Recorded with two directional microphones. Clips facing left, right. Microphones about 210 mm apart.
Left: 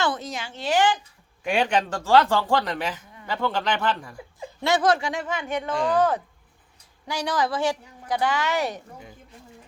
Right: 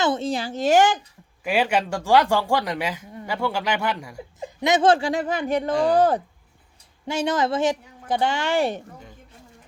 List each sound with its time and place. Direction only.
0.0 s a woman's voice: 25° right (ahead or behind); by 0.9 s 45° right (ahead or behind)
1.5 s speech: 5° right (ahead or behind); by 6.2 s 35° right (ahead or behind)
7.1 s speech: 25° right (ahead or behind)